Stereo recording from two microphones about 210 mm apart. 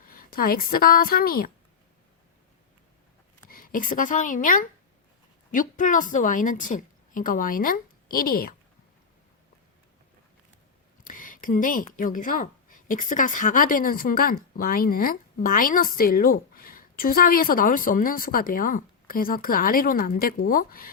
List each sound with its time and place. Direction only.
0.0 s a woman's voice: 45° left (ahead or behind)
3.5 s a woman's voice: 40° left (ahead or behind)
11.0 s speech: 40° left (ahead or behind)